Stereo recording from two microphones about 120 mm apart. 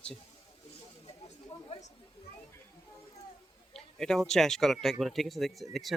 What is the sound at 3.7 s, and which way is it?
Speech, 5° left (ahead or behind).